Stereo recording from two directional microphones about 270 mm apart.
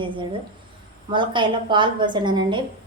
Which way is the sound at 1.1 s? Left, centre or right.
Centre.